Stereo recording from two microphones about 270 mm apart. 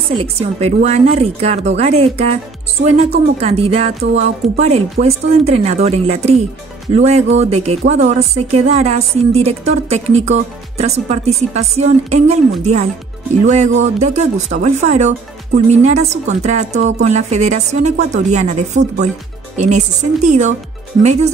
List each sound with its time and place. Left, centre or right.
0.1 s a woman's voice: right
13.9 s a woman's voice: right